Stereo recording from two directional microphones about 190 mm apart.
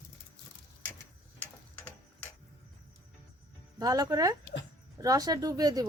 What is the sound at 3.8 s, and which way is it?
A woman's voice, 20° right (ahead or behind).